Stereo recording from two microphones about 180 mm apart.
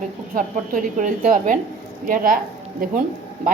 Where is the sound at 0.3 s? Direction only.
50° right (ahead or behind).